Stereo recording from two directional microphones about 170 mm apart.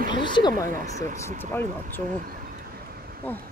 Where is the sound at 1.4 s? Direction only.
15° left (ahead or behind).